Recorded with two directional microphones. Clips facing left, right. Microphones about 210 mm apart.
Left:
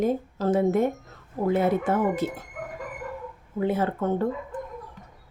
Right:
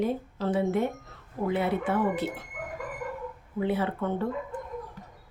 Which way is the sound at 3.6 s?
45° left (ahead or behind).